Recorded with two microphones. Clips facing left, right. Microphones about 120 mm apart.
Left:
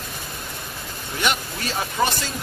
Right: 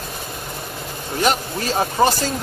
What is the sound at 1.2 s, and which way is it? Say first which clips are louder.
Speech: right 5 dB; 35° right (ahead or behind).